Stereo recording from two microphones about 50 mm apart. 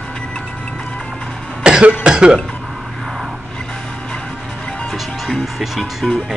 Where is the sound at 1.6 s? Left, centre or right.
Centre.